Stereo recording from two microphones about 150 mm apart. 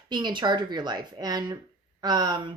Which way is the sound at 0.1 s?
30° right (ahead or behind).